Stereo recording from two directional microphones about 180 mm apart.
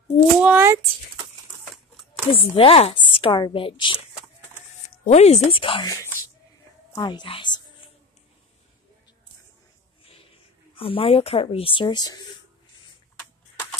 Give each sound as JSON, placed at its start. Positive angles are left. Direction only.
{"t": 0.4, "sound": "speech", "side_deg": -10}
{"t": 1.6, "sound": "a sound", "side_deg": 0}
{"t": 2.3, "sound": "speech", "side_deg": 30}
{"t": 4.8, "sound": "a woman's voice", "side_deg": 40}
{"t": 10.8, "sound": "speech", "side_deg": 30}